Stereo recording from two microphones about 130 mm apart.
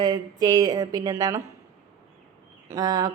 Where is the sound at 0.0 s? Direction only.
30° right (ahead or behind).